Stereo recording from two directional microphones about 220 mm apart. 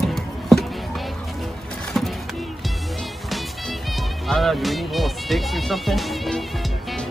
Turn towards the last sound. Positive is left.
turn(degrees=0)  # may be behind; listen again after turning